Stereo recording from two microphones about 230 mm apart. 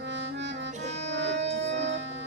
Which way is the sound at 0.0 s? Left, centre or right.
Right.